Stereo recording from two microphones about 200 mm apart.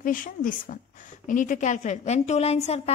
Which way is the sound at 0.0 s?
40° left (ahead or behind).